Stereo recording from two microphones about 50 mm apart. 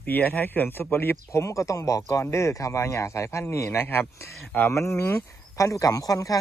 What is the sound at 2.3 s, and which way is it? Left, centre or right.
Speech, left.